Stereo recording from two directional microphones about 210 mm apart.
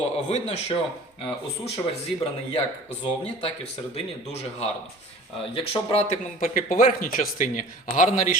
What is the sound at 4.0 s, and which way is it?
A man's voice, 30° left (ahead or behind).